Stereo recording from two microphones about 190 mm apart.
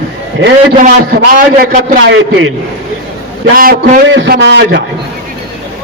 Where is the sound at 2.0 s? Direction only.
75° right (ahead or behind).